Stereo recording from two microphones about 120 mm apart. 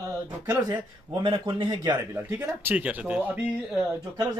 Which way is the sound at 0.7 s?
40° right (ahead or behind).